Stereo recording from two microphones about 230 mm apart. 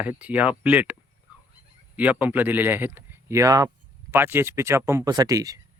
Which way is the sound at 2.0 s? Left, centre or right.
Centre.